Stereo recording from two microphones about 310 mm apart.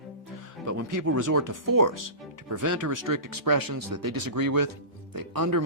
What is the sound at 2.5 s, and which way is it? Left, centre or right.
Speech, right.